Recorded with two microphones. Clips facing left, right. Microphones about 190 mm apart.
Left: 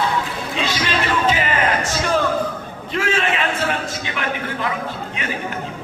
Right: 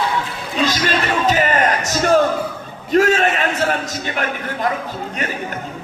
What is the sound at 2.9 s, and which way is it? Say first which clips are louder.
Speech: right 7 dB; 40° right (ahead or behind).